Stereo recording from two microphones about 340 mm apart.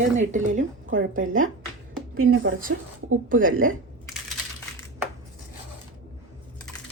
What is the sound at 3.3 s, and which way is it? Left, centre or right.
Speech, right.